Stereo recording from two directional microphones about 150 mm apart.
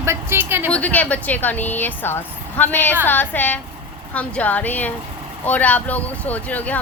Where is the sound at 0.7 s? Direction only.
10° left (ahead or behind).